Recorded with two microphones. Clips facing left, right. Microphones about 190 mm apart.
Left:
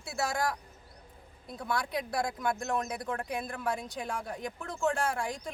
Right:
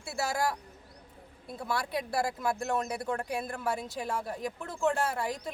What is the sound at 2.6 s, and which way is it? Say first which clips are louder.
Speech: right 1 dB; 30° right (ahead or behind).